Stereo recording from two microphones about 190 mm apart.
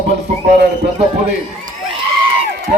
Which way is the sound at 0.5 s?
60° right (ahead or behind).